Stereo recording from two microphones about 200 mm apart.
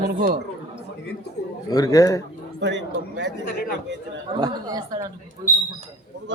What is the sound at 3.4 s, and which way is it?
Speech, 45° left (ahead or behind).